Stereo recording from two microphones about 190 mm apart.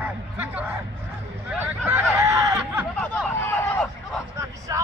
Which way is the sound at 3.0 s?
10° left (ahead or behind).